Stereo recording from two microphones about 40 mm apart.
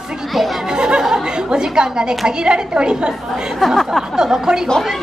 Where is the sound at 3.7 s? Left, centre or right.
Centre.